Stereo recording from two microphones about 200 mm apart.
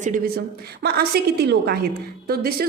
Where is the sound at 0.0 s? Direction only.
45° right (ahead or behind).